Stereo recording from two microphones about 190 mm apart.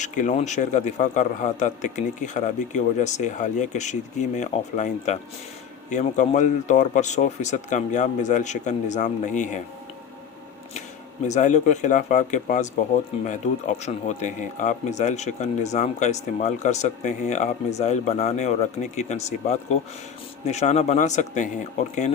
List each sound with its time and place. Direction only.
0.0 s a man's voice: 40° left (ahead or behind)
11.3 s a man's voice: 40° left (ahead or behind)